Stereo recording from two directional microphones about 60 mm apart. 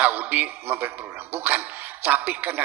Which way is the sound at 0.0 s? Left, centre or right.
Right.